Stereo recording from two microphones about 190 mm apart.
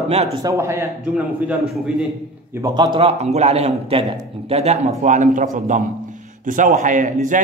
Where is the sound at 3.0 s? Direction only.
35° right (ahead or behind).